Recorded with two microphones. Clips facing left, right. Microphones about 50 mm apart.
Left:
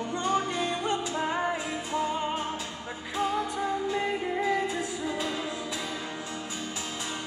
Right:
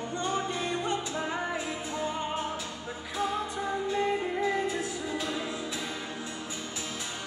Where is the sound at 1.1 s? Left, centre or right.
Left.